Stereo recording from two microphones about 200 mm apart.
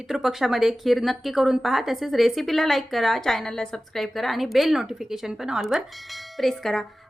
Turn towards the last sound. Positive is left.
turn(degrees=0)  # may be behind; listen again after turning